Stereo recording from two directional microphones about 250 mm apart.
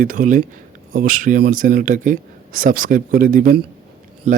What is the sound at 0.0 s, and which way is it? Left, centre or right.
Speech, right.